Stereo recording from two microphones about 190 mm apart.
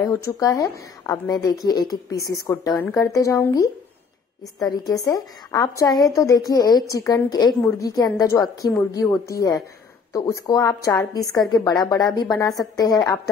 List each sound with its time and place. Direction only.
0.4 s a woman's voice: 15° left (ahead or behind)